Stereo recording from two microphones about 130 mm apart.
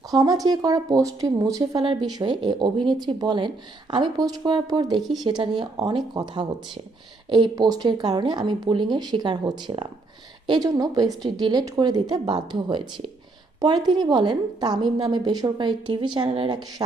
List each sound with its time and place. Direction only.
0.1 s a woman's voice: 30° right (ahead or behind)
4.9 s speech: centre (ahead or behind)
5.4 s a woman's voice: 30° right (ahead or behind)